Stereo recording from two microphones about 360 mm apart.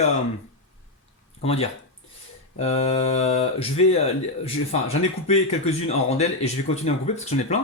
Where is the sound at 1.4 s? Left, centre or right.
Centre.